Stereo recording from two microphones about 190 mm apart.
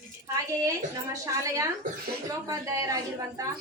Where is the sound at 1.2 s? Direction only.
15° right (ahead or behind).